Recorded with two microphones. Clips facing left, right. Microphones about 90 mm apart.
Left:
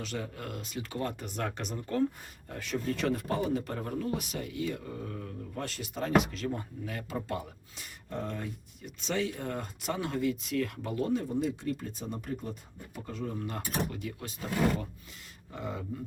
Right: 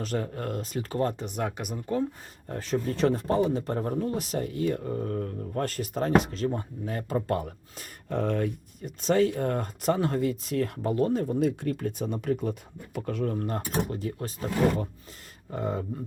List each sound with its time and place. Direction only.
0.0 s speech: 40° right (ahead or behind)
1.2 s speech: 15° right (ahead or behind)
2.5 s speech: 35° right (ahead or behind)
8.1 s speech: 70° right (ahead or behind)
8.8 s speech: 45° right (ahead or behind); by 13.3 s 65° right (ahead or behind)
13.3 s speech: 45° right (ahead or behind)